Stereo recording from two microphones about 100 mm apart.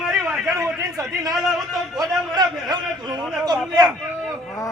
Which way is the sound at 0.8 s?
35° right (ahead or behind).